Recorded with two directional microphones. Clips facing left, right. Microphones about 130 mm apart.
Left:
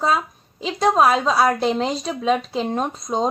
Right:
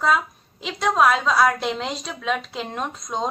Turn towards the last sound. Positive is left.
turn(degrees=40)  # may be behind; listen again after turning